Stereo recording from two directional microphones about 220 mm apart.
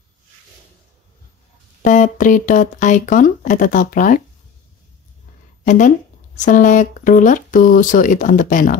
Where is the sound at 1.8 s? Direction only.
35° left (ahead or behind).